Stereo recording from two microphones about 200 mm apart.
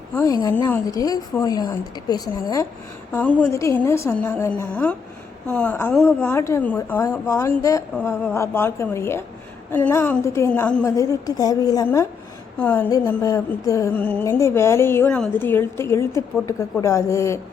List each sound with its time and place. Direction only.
0.1 s music: 15° left (ahead or behind)
0.9 s a woman's voice: 20° left (ahead or behind)
3.1 s music: 10° left (ahead or behind)
10.8 s a woman's voice: 15° left (ahead or behind)
12.5 s music: 10° left (ahead or behind)